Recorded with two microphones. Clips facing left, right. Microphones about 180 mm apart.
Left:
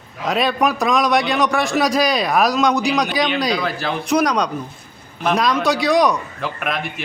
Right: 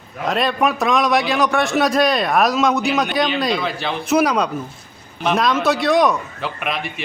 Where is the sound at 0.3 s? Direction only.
Centre (ahead or behind).